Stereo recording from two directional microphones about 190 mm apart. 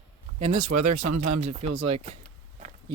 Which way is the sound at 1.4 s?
35° right (ahead or behind).